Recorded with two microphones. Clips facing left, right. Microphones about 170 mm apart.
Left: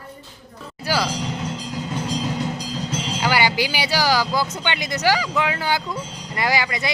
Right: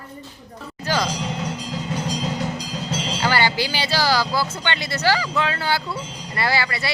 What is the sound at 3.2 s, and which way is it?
Speech, 10° left (ahead or behind).